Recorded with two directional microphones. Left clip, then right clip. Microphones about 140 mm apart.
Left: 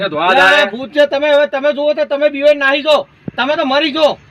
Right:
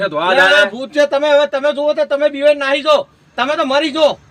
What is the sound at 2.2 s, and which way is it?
Speech, 15° right (ahead or behind).